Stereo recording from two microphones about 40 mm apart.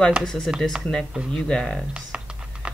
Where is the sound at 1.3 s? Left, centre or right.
Left.